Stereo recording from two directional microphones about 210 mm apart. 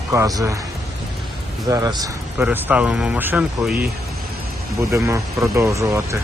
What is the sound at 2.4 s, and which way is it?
Speech, 5° right (ahead or behind).